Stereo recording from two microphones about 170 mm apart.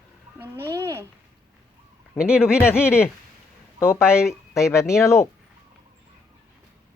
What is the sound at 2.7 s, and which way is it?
Speech, 15° left (ahead or behind).